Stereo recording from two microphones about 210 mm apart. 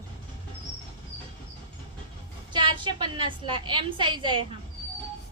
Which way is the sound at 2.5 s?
20° right (ahead or behind).